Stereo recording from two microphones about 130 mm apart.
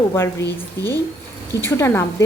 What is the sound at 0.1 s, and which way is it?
Speech, 20° left (ahead or behind).